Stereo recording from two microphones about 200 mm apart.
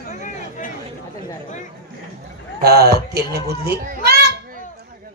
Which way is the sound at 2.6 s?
55° right (ahead or behind).